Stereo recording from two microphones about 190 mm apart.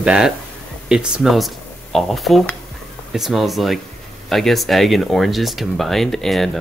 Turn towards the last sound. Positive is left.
turn(degrees=0)  # may be behind; listen again after turning